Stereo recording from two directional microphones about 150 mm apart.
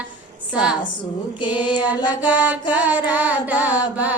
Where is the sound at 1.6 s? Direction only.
30° left (ahead or behind).